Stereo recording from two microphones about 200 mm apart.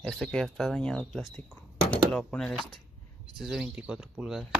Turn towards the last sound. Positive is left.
turn(degrees=-5)  # may be behind; listen again after turning